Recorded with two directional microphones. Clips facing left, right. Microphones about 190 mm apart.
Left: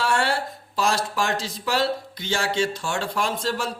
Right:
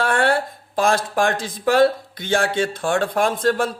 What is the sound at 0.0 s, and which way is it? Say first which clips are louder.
Speech: right 5 dB; 55° right (ahead or behind).